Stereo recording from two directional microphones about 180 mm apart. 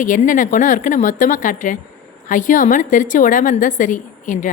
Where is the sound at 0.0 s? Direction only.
45° left (ahead or behind).